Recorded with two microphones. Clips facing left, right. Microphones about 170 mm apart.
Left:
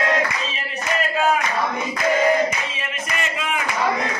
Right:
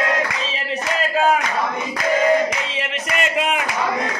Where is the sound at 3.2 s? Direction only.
70° right (ahead or behind).